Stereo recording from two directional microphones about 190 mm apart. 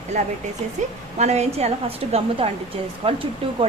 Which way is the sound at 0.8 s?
40° right (ahead or behind).